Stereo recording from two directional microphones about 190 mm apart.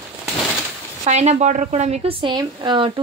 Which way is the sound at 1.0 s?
35° right (ahead or behind).